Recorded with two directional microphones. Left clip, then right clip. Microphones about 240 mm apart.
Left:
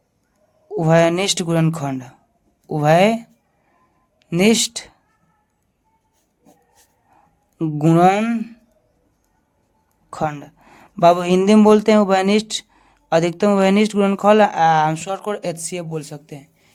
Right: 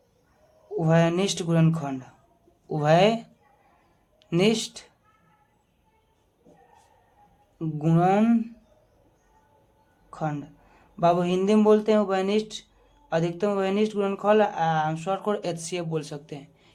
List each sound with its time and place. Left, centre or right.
0.8 s speech: left
7.6 s speech: left
10.1 s speech: left